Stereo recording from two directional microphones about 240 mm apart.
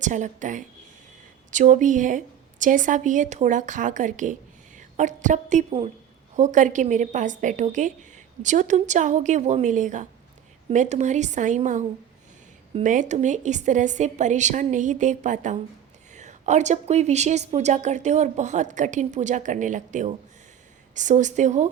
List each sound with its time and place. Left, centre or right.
0.0 s a woman's voice: right